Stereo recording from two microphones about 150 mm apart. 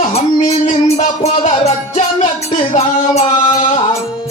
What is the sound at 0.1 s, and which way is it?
Music, 50° left (ahead or behind).